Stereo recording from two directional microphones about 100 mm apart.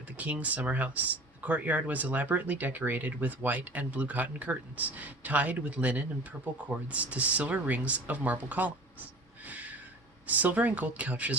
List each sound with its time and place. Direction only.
0.2 s speech: 15° right (ahead or behind)
9.5 s a sound: 15° right (ahead or behind)
10.2 s speech: 15° right (ahead or behind)